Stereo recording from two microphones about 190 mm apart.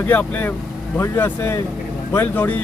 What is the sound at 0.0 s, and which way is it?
Speech, 10° left (ahead or behind).